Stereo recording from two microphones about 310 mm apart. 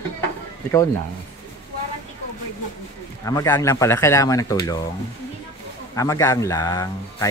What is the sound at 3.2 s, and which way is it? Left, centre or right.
Speech, centre.